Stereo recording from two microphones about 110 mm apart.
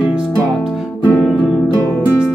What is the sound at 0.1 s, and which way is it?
Music, 5° right (ahead or behind).